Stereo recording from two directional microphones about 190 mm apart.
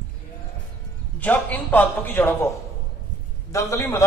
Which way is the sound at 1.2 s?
10° left (ahead or behind).